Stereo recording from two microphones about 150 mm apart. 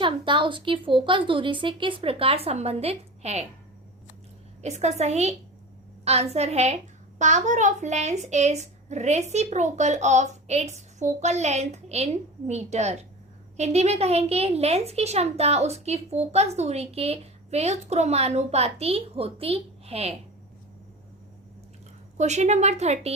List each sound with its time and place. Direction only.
0.0 s speech: 35° right (ahead or behind)
4.6 s a woman's voice: 50° right (ahead or behind)
6.3 s a woman's voice: 45° right (ahead or behind)
22.2 s a woman's voice: 50° right (ahead or behind)